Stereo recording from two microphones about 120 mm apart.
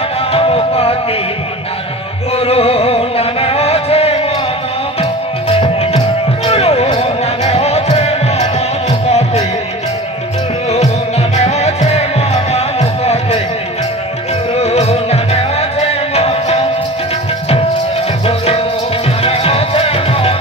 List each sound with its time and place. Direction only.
0.3 s music: 50° left (ahead or behind)
2.3 s music: 55° left (ahead or behind)
5.5 s music: 50° left (ahead or behind)
10.7 s music: 65° left (ahead or behind)
14.5 s music: 60° left (ahead or behind)
18.2 s music: 55° left (ahead or behind)